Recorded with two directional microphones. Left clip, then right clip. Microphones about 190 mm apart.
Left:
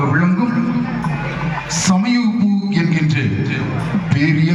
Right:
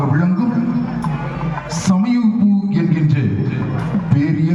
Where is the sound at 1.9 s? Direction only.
70° right (ahead or behind).